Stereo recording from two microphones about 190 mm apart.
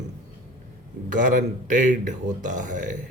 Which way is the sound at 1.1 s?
45° right (ahead or behind).